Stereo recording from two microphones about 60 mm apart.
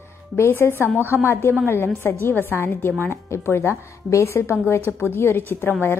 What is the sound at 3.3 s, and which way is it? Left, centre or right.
Speech, left.